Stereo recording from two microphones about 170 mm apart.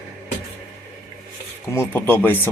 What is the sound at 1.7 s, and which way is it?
Speech, 10° left (ahead or behind).